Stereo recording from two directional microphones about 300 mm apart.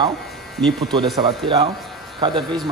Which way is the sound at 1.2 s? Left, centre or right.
Centre.